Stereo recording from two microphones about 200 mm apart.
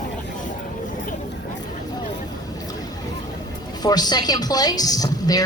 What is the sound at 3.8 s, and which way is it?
A woman's voice, 20° left (ahead or behind).